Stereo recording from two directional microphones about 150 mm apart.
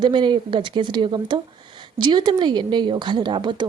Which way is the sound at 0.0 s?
30° right (ahead or behind).